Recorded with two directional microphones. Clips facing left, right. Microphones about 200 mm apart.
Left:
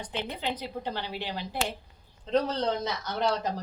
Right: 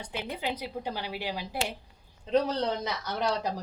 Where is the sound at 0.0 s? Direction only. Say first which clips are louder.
Left 1 dB; 10° right (ahead or behind).